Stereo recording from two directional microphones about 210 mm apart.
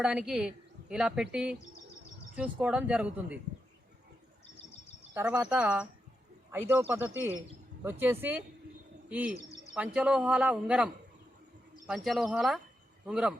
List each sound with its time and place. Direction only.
0.0 s a woman's voice: 5° right (ahead or behind)
5.1 s speech: 5° right (ahead or behind)
9.3 s bird: 35° left (ahead or behind)
9.7 s a woman's voice: 5° right (ahead or behind)
11.9 s a woman's voice: centre (ahead or behind)